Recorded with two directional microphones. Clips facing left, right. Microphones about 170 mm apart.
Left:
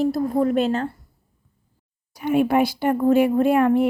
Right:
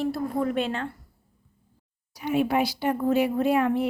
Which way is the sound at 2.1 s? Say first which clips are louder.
Left 5 dB; 55° left (ahead or behind).